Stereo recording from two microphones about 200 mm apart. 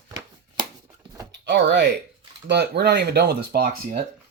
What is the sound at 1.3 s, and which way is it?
Speech, 60° right (ahead or behind).